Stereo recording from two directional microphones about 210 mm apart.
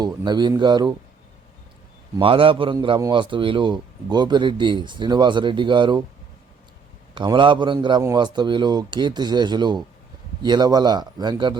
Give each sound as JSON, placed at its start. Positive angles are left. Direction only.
{"t": 0.0, "sound": "a man's voice", "side_deg": -20}
{"t": 2.1, "sound": "a man's voice", "side_deg": -25}
{"t": 7.1, "sound": "a man's voice", "side_deg": -25}